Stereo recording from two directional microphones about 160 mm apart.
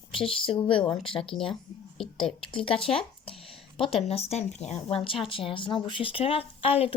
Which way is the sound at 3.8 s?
35° left (ahead or behind).